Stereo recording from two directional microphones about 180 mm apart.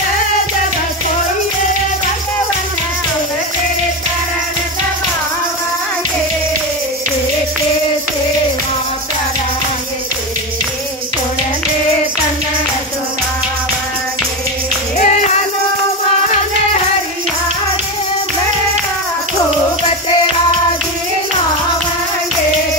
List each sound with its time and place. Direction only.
15.0 s music: 40° left (ahead or behind)